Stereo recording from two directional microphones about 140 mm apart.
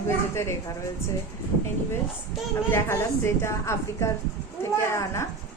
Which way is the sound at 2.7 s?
20° left (ahead or behind).